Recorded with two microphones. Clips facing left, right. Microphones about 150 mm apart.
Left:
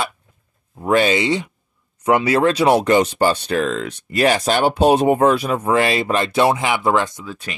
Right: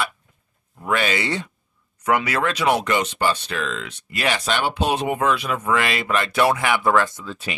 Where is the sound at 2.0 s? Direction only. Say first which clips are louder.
Left 6 dB; 25° left (ahead or behind).